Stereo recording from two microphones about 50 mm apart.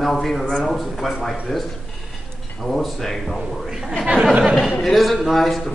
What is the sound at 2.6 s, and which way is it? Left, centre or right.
Speech, centre.